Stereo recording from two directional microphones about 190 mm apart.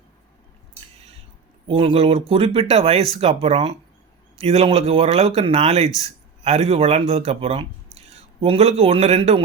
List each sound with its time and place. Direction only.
1.6 s speech: 30° right (ahead or behind)